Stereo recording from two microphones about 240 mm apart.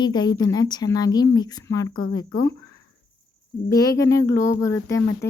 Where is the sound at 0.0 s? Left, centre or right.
Centre.